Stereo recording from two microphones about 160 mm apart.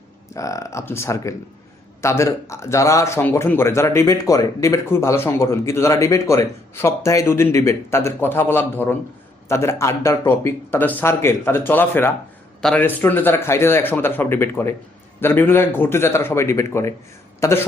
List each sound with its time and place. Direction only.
0.3 s a man's voice: 20° left (ahead or behind)